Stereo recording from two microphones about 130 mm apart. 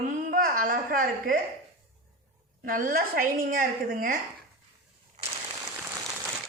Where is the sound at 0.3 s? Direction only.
90° right.